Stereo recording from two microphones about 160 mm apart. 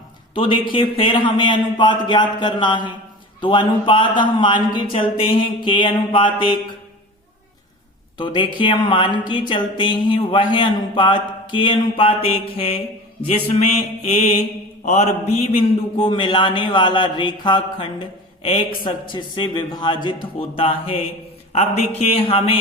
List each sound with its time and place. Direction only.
0.3 s a man's voice: 35° left (ahead or behind)
8.2 s speech: 30° left (ahead or behind)
14.8 s mantra: 45° left (ahead or behind)
16.0 s speech: 30° left (ahead or behind)